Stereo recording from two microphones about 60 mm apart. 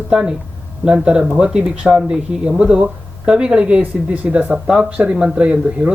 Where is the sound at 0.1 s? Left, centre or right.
Centre.